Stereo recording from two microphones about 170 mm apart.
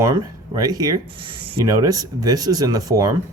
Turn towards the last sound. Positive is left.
turn(degrees=-20)  # may be behind; listen again after turning